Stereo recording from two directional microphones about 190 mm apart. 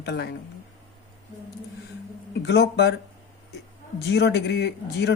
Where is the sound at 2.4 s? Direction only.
60° left (ahead or behind).